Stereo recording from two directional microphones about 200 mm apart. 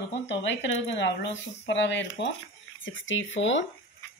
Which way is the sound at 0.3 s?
65° left (ahead or behind).